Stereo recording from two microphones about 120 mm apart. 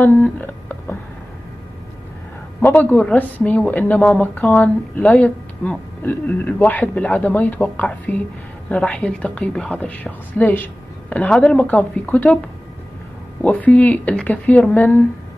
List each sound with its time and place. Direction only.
0.0 s a sound: 15° left (ahead or behind)
2.6 s a woman's voice: 15° left (ahead or behind)
13.4 s a woman's voice: 10° left (ahead or behind)